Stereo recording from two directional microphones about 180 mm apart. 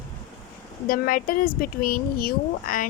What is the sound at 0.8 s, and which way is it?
Speech, 55° left (ahead or behind).